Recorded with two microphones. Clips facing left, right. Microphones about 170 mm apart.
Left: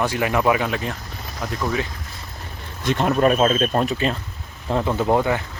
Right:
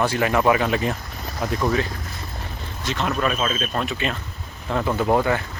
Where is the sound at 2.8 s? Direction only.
50° left (ahead or behind).